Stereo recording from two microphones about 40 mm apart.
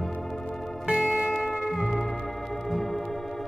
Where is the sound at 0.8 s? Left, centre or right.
Centre.